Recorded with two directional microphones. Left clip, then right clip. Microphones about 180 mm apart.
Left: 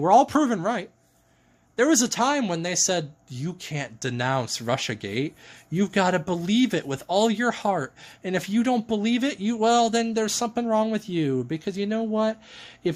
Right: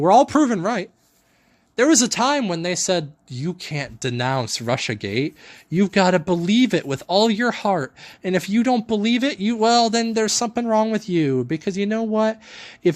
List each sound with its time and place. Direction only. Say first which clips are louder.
0.0 s speech: right 4 dB; 40° right (ahead or behind)